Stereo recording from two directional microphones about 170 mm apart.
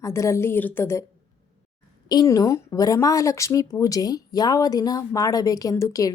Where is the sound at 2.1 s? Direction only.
20° left (ahead or behind).